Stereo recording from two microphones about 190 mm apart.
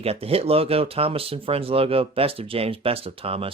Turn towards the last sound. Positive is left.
turn(degrees=-30)  # may be behind; listen again after turning